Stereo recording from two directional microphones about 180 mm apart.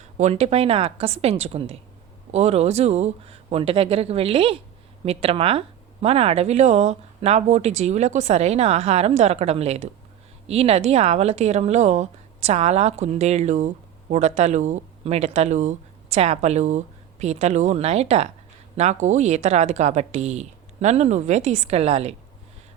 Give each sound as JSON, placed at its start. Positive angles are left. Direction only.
{"t": 0.0, "sound": "speech", "side_deg": -40}